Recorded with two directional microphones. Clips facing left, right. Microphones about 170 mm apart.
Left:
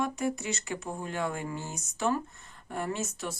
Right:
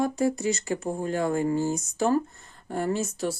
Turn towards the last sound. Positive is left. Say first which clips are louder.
# right 7 dB
turn(degrees=-35)  # may be behind; listen again after turning